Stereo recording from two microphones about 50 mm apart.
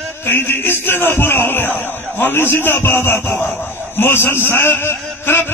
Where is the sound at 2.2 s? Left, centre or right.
Left.